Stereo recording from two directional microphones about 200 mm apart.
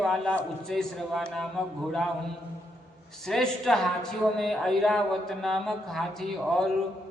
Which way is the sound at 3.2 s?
Centre (ahead or behind).